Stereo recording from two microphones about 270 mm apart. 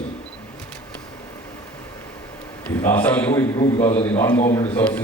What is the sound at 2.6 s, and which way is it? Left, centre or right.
A man's voice, centre.